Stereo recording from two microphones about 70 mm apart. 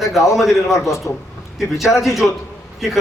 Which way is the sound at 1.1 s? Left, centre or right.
Left.